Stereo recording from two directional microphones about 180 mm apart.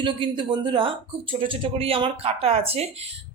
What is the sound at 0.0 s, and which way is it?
Speech, 25° right (ahead or behind).